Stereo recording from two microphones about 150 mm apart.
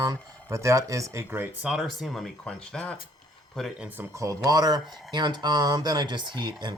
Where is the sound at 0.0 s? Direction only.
20° right (ahead or behind).